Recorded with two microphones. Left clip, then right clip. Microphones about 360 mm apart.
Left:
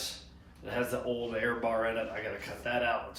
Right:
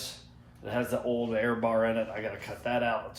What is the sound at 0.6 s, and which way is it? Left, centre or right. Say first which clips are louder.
Speech: right 2 dB; right.